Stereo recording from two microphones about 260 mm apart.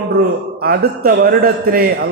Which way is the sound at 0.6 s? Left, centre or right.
Right.